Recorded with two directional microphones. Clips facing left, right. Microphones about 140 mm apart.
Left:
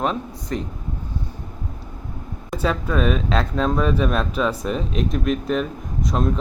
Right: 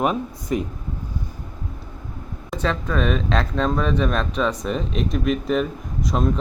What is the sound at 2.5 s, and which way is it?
Speech, 5° left (ahead or behind).